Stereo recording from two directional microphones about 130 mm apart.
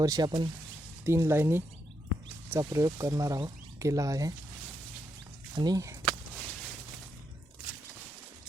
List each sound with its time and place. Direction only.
0.0 s speech: 30° right (ahead or behind)
1.0 s speech: 20° right (ahead or behind)
5.5 s speech: 30° right (ahead or behind)
6.1 s a sound: centre (ahead or behind)